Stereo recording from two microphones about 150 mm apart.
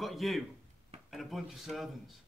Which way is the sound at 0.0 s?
Centre (ahead or behind).